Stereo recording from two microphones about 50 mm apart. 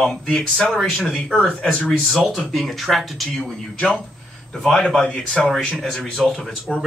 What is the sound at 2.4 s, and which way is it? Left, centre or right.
Speech, centre.